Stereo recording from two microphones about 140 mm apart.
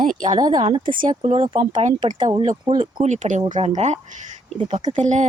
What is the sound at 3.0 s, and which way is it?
Speech, 60° right (ahead or behind).